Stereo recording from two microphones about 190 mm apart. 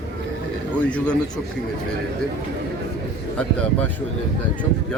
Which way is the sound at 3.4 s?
5° left (ahead or behind).